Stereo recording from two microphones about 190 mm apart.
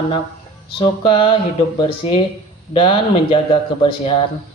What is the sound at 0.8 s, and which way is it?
Speech, 25° left (ahead or behind).